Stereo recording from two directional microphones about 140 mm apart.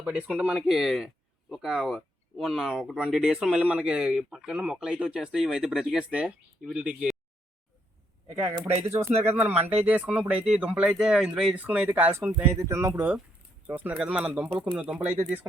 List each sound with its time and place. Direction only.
0.0 s speech: 5° right (ahead or behind)
8.3 s speech: 20° right (ahead or behind)